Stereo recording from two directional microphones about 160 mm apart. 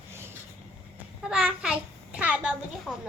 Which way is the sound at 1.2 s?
5° right (ahead or behind).